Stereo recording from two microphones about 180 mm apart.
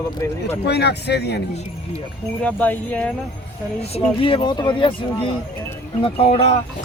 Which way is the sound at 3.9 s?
35° left (ahead or behind).